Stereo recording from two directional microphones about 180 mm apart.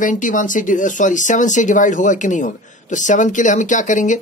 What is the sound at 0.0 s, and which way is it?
Speech, 45° left (ahead or behind).